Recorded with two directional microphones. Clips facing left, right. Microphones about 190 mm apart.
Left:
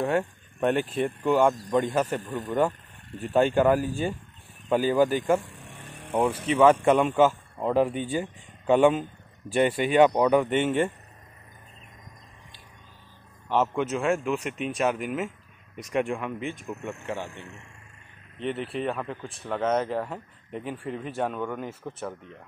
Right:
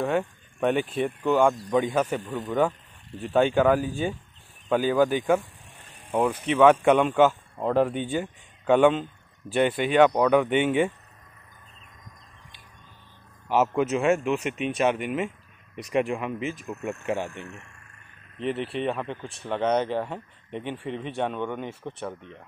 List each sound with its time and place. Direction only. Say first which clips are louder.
0.0 s speech: even; centre (ahead or behind)
5.5 s vehicle: left 7 dB; 70° left (ahead or behind)
6.4 s speech: right 1 dB; centre (ahead or behind)
13.5 s speech: right 2 dB; 5° right (ahead or behind)
16.8 s speech: right 6 dB; 15° right (ahead or behind)
18.4 s speech: right 2 dB; centre (ahead or behind)